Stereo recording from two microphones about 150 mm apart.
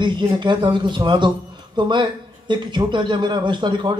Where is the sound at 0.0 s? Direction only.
30° right (ahead or behind).